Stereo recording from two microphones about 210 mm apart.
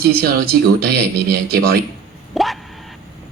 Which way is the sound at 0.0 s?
45° right (ahead or behind).